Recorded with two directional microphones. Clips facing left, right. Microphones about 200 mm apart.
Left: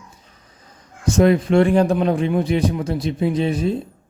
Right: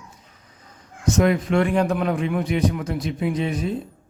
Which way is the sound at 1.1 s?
30° left (ahead or behind).